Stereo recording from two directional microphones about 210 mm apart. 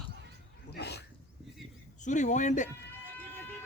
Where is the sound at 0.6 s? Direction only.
50° left (ahead or behind).